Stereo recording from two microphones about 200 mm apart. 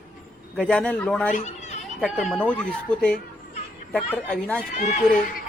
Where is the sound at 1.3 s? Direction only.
35° left (ahead or behind).